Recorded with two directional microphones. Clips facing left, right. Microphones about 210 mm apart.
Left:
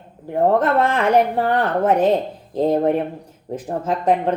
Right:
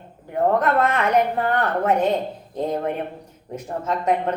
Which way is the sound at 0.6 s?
30° left (ahead or behind).